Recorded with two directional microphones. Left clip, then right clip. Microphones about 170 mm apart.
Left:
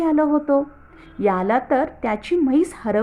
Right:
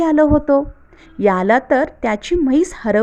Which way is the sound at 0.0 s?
40° right (ahead or behind).